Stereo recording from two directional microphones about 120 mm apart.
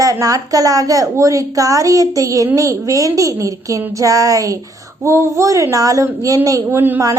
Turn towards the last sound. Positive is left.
turn(degrees=-15)  # may be behind; listen again after turning